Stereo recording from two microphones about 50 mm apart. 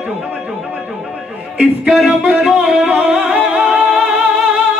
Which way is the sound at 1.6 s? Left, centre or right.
Centre.